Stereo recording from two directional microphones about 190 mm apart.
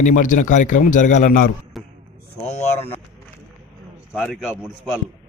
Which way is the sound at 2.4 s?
35° left (ahead or behind).